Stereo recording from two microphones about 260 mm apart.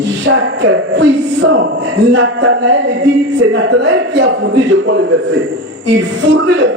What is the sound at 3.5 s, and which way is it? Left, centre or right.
A man's voice, right.